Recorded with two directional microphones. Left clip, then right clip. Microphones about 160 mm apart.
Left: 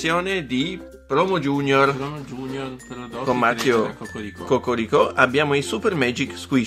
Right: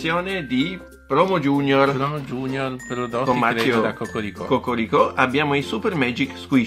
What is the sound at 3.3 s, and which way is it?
Speech, 30° left (ahead or behind).